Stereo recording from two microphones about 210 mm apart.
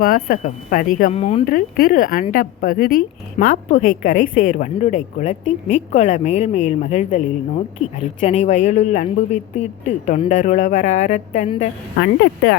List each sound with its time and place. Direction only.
0.0 s a woman's voice: 45° left (ahead or behind)
1.1 s speech: 30° left (ahead or behind)
1.5 s a woman's voice: 45° left (ahead or behind)
8.2 s speech: 35° left (ahead or behind)
11.9 s a woman's voice: 55° left (ahead or behind)